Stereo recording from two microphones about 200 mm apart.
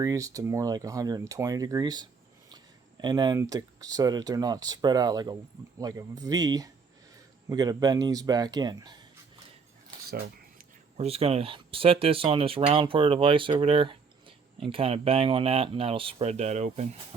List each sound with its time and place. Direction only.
0.0 s speech: 15° right (ahead or behind)
10.9 s speech: 30° right (ahead or behind)